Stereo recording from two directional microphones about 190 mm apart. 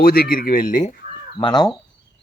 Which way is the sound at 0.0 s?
50° left (ahead or behind).